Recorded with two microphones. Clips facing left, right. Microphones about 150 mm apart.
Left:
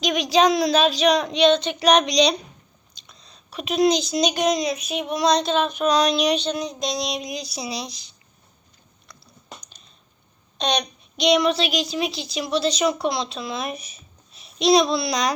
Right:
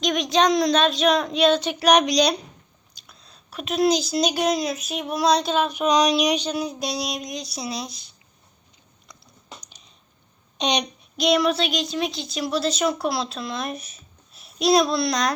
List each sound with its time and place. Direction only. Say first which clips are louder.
0.0 s a child's voice: left 2 dB; centre (ahead or behind)
10.6 s speech: even; 15° right (ahead or behind)
11.2 s a child's voice: left 1 dB; centre (ahead or behind)